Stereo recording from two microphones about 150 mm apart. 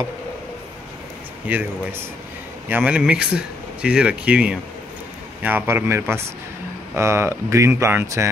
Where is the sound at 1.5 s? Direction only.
10° right (ahead or behind).